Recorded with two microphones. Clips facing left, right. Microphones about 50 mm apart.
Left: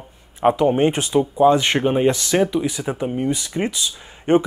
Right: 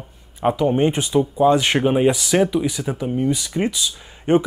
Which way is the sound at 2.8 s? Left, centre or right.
Centre.